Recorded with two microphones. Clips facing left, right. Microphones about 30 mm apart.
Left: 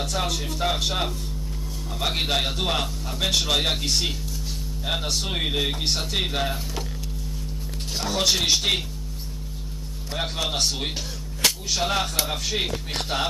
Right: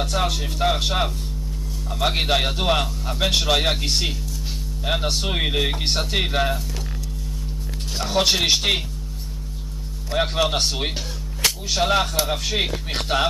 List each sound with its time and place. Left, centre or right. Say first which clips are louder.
0.0 s a man's voice: right 3 dB; centre
8.1 s speech: right 3 dB; right
10.1 s a man's voice: right 6 dB; right